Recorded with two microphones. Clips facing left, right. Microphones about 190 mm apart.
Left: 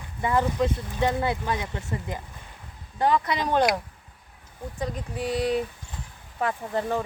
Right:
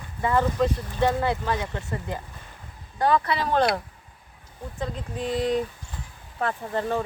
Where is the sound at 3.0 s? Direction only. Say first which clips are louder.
Right 1 dB; 20° left (ahead or behind).